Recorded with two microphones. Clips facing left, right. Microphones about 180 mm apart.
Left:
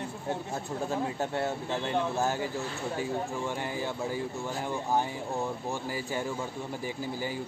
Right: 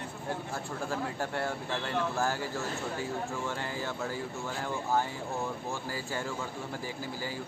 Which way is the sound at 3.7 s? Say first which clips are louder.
Left 3 dB; 15° left (ahead or behind).